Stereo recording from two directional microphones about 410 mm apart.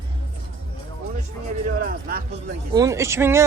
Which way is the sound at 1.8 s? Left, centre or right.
Right.